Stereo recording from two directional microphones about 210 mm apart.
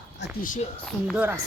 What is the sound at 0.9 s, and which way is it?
Speech, 5° left (ahead or behind).